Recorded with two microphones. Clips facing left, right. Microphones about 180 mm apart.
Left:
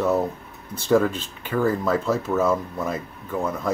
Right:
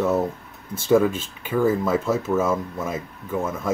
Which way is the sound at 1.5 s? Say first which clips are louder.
Right 1 dB; 10° right (ahead or behind).